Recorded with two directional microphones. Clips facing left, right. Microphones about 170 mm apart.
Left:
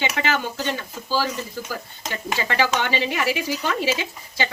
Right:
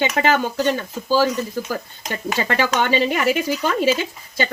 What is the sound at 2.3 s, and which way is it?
Speech, 50° right (ahead or behind).